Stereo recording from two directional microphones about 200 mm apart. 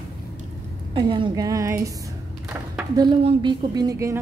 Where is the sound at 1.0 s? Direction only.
25° right (ahead or behind).